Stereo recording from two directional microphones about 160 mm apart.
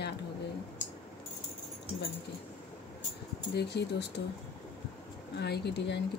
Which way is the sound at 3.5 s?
90° left.